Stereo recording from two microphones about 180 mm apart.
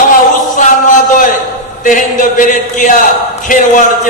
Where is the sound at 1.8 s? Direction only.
45° left (ahead or behind).